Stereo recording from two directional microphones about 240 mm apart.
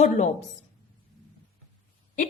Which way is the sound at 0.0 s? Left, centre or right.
Left.